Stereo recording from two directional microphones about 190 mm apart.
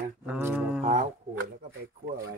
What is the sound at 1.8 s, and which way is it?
Speech, 60° right (ahead or behind).